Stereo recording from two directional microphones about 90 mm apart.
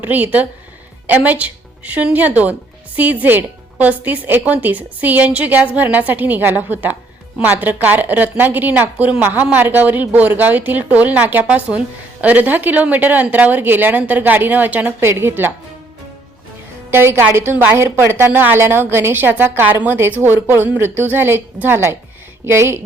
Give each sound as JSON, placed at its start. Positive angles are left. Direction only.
{"t": 0.0, "sound": "speech", "side_deg": -20}
{"t": 16.9, "sound": "speech", "side_deg": -25}